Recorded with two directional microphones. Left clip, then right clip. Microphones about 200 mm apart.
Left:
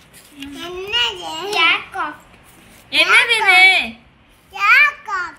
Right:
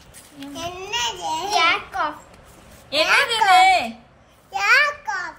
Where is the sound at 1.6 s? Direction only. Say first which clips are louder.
Left 4 dB; 55° right (ahead or behind).